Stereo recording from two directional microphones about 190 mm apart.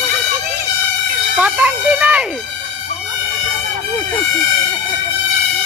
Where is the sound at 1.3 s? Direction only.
10° right (ahead or behind).